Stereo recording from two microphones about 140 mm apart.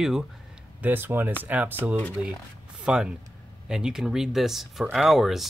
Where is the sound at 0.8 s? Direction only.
15° right (ahead or behind).